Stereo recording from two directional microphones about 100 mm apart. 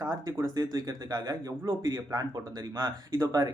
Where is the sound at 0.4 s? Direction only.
40° right (ahead or behind).